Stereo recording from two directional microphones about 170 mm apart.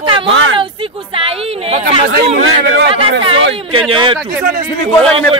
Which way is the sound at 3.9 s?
30° right (ahead or behind).